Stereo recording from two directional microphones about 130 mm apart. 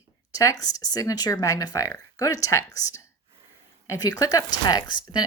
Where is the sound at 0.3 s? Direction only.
30° left (ahead or behind).